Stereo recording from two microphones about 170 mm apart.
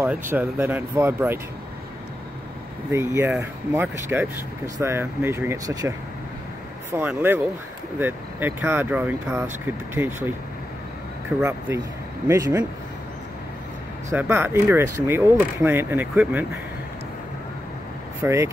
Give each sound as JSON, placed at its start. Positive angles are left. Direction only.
{"t": 0.0, "sound": "speech", "side_deg": -10}
{"t": 2.9, "sound": "speech", "side_deg": -15}
{"t": 12.3, "sound": "speech", "side_deg": -15}
{"t": 14.1, "sound": "speech", "side_deg": -10}
{"t": 18.2, "sound": "speech", "side_deg": -15}